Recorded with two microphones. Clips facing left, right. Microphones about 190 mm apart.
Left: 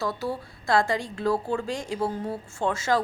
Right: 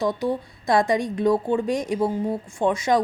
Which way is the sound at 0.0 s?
20° right (ahead or behind).